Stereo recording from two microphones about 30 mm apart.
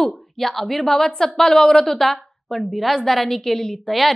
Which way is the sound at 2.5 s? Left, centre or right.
Centre.